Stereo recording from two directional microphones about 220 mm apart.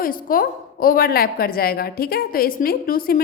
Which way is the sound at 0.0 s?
40° left (ahead or behind).